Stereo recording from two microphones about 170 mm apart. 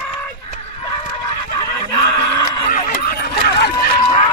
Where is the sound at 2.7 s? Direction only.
60° left (ahead or behind).